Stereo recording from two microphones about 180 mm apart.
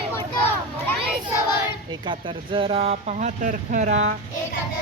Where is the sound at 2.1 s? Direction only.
30° right (ahead or behind).